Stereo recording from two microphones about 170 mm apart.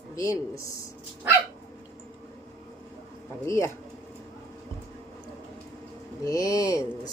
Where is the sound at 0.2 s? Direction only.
20° left (ahead or behind).